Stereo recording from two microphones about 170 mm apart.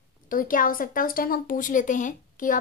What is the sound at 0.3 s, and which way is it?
A woman's voice, 55° left (ahead or behind).